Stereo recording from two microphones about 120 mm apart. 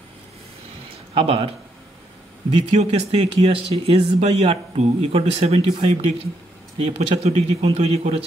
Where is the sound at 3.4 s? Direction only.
55° right (ahead or behind).